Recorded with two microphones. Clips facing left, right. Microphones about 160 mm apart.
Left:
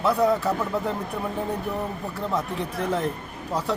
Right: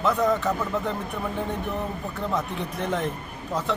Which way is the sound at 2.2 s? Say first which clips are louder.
Left 1 dB; 5° left (ahead or behind).